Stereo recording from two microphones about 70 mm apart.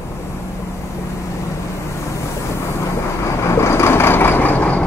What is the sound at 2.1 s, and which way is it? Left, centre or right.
Vehicle, left.